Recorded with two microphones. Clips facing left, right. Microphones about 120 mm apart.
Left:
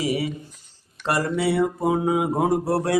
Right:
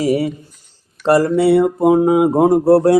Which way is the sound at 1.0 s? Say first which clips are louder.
Right 10 dB; 35° right (ahead or behind).